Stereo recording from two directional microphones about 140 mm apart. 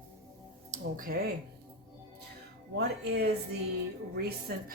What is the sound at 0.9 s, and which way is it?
Speech, 85° right.